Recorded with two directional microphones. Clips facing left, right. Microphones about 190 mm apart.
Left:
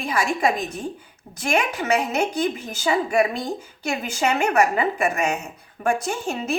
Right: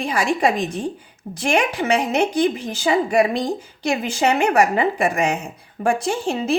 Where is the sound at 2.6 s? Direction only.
30° right (ahead or behind).